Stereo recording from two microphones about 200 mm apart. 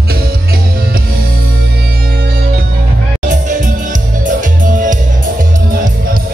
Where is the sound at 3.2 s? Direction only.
40° right (ahead or behind).